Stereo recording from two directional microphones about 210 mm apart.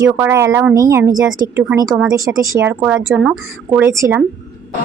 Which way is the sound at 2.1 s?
15° right (ahead or behind).